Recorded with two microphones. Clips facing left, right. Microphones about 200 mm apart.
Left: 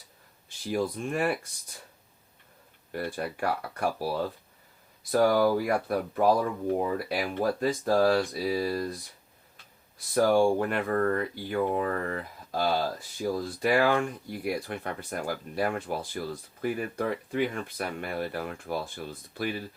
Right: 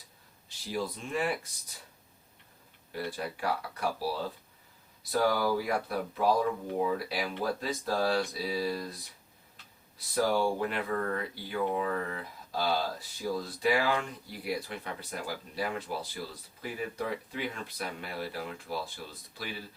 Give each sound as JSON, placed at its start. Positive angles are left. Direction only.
{"t": 0.7, "sound": "speech", "side_deg": 50}
{"t": 2.9, "sound": "speech", "side_deg": 50}
{"t": 5.2, "sound": "speech", "side_deg": 50}
{"t": 10.2, "sound": "speech", "side_deg": 50}